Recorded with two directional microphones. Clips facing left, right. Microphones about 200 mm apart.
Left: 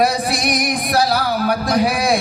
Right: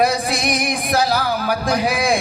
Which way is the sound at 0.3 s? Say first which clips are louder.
Left 1 dB; 40° left (ahead or behind).